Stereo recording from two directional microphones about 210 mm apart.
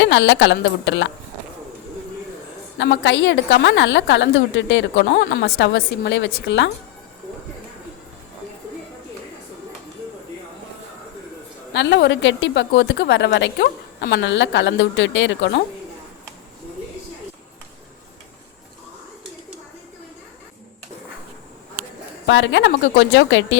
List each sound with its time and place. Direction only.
0.0 s a woman's voice: 60° left (ahead or behind)
2.7 s a woman's voice: 55° left (ahead or behind)
11.7 s a woman's voice: 55° left (ahead or behind)
22.3 s a woman's voice: 60° left (ahead or behind)